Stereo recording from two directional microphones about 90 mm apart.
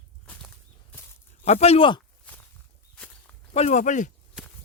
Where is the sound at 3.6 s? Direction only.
90° left.